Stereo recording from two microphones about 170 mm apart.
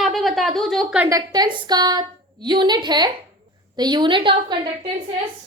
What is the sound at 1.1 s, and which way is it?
A woman's voice, 25° right (ahead or behind).